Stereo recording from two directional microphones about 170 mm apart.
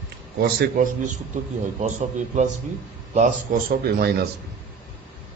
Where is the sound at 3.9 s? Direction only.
65° right (ahead or behind).